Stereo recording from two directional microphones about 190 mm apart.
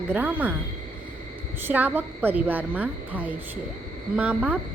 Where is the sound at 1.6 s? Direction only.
10° right (ahead or behind).